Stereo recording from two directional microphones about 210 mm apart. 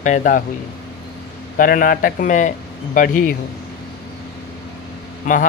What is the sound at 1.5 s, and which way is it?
Speech, 40° left (ahead or behind).